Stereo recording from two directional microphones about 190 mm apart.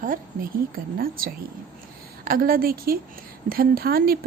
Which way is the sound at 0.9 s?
50° right (ahead or behind).